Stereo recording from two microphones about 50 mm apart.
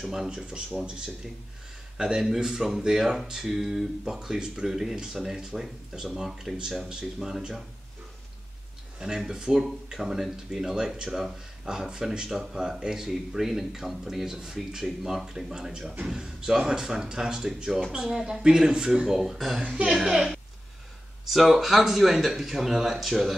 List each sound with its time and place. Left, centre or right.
0.0 s speech: centre
9.0 s speech: centre
19.1 s speech: centre
21.3 s speech: centre